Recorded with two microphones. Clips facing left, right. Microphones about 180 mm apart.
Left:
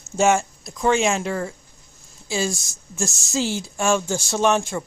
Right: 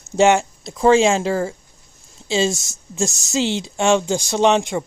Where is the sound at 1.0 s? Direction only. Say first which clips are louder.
Right 5 dB; 30° right (ahead or behind).